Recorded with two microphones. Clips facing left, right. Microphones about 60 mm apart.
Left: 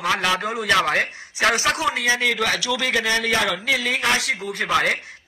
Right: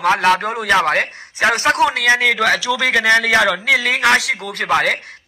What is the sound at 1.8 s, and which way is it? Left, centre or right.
Speech, right.